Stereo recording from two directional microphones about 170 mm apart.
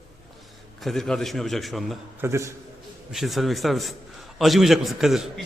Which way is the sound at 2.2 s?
15° right (ahead or behind).